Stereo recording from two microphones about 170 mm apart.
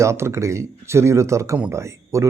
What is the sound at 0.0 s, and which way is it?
Speech, 15° right (ahead or behind).